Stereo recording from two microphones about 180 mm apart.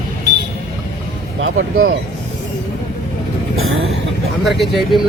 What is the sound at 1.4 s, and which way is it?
Speech, 90° right.